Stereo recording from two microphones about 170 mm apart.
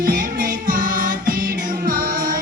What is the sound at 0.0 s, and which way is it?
Music, 55° right (ahead or behind).